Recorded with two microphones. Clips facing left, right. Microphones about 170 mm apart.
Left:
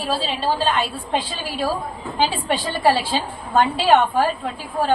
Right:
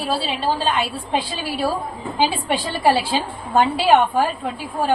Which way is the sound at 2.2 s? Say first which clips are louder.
Right 1 dB; 10° right (ahead or behind).